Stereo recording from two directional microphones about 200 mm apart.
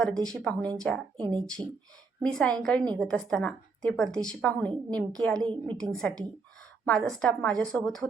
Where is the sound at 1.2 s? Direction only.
20° right (ahead or behind).